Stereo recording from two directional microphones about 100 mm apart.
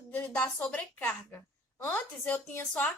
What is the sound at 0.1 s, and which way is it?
Speech, 15° left (ahead or behind).